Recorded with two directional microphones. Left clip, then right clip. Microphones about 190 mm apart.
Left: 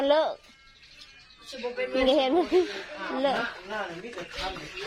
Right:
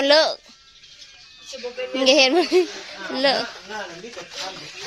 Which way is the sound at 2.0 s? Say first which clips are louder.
Right 8 dB; 15° right (ahead or behind).